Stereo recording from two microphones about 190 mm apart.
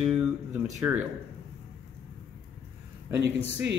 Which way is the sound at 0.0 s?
5° right (ahead or behind).